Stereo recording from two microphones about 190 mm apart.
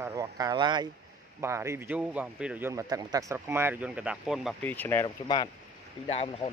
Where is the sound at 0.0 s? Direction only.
20° right (ahead or behind).